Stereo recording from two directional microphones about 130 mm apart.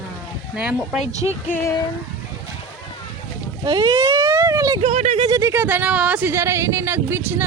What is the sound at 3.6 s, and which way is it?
Speech, 40° right (ahead or behind).